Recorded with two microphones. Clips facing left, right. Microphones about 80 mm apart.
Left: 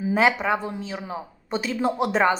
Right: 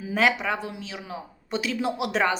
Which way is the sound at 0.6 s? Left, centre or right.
Left.